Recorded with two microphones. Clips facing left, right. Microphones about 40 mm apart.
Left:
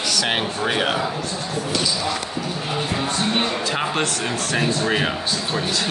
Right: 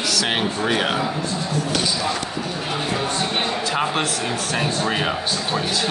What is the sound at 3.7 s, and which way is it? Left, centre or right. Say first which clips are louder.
Speech: right 1 dB; centre.